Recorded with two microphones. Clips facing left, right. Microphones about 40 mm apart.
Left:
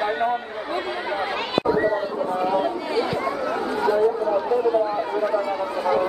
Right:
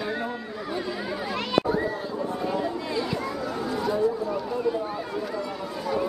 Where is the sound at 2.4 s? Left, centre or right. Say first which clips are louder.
Left 7 dB; left.